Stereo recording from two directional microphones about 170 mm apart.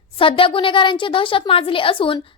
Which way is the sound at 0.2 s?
30° left (ahead or behind).